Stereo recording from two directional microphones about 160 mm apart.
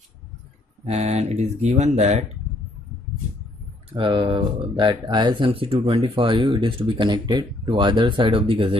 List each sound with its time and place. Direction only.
0.8 s speech: 45° right (ahead or behind)
3.9 s speech: 30° right (ahead or behind)